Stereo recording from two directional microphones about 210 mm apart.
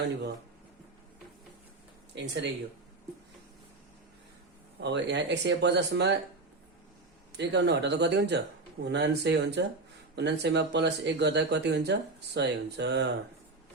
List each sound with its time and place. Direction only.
2.1 s speech: 55° right (ahead or behind)
4.8 s speech: 55° right (ahead or behind)
7.3 s speech: 55° right (ahead or behind)